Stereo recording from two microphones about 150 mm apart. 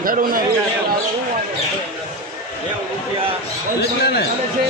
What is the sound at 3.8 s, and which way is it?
Speech, 90° left.